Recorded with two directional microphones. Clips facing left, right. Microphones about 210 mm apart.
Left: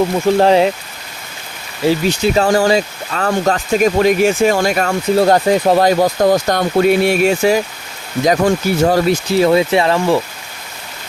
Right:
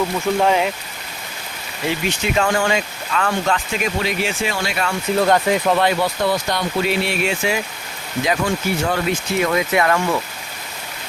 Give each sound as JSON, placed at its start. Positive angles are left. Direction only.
{"t": 0.3, "sound": "speech", "side_deg": 35}
{"t": 1.9, "sound": "speech", "side_deg": 35}